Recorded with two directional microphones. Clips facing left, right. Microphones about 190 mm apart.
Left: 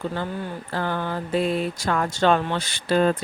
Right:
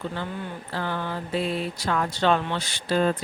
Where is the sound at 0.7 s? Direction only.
50° left (ahead or behind).